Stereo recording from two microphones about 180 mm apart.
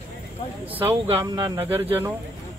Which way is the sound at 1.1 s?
25° right (ahead or behind).